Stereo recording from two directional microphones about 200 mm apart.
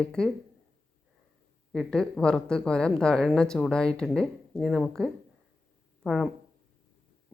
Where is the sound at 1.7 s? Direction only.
Centre (ahead or behind).